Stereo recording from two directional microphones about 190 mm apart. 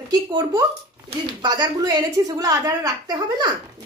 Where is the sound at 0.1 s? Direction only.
20° right (ahead or behind).